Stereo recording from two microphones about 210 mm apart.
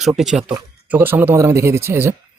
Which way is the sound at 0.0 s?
Centre (ahead or behind).